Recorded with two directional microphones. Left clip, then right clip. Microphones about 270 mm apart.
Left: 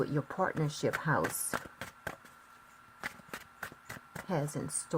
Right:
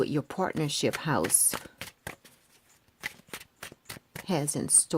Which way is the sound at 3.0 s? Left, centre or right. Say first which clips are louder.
Right 3 dB; centre.